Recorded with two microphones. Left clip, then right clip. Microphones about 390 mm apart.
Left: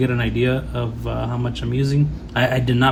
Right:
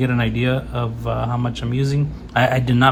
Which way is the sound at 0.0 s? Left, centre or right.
Centre.